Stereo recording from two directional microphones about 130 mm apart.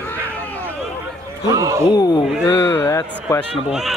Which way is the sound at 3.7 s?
5° right (ahead or behind).